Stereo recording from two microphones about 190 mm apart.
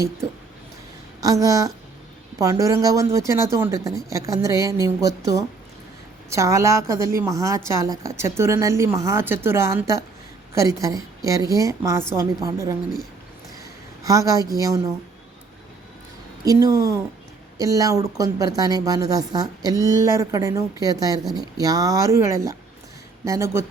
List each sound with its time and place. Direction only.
1.2 s a woman's voice: 20° right (ahead or behind)
16.4 s a woman's voice: 20° right (ahead or behind)